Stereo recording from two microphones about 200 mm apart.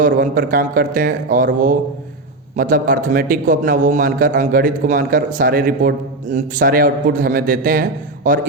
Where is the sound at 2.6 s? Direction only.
45° right (ahead or behind).